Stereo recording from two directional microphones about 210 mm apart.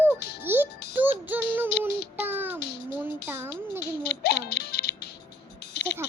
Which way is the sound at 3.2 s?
10° right (ahead or behind).